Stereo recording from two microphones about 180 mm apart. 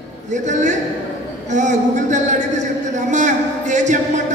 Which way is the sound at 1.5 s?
40° right (ahead or behind).